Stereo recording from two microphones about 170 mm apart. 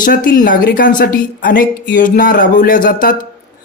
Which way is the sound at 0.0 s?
55° left (ahead or behind).